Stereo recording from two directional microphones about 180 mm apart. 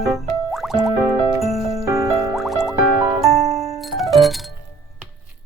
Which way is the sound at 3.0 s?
15° right (ahead or behind).